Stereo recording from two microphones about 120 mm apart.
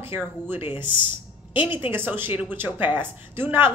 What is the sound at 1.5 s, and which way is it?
Speech, 45° left (ahead or behind).